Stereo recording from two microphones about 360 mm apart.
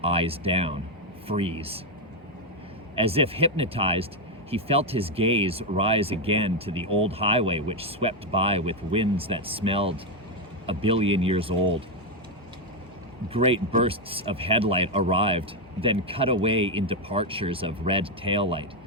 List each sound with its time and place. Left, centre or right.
0.0 s speech: centre
2.9 s speech: centre
13.3 s speech: centre